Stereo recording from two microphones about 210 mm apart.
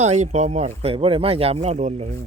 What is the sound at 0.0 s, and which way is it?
Speech, 30° right (ahead or behind).